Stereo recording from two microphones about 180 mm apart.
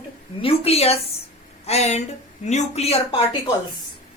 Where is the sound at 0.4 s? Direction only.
35° left (ahead or behind).